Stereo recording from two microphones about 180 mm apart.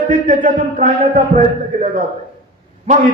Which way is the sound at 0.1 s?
45° right (ahead or behind).